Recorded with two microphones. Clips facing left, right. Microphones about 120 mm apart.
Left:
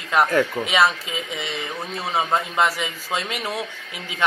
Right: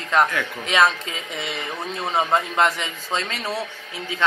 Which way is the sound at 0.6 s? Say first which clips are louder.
Even; 5° left (ahead or behind).